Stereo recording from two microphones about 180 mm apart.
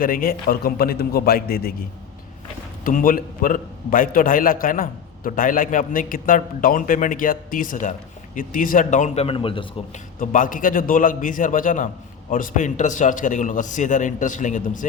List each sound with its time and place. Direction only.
0.0 s a man's voice: 50° left (ahead or behind)
2.8 s a man's voice: 50° left (ahead or behind); by 9.6 s 30° left (ahead or behind)
10.2 s a man's voice: 50° left (ahead or behind)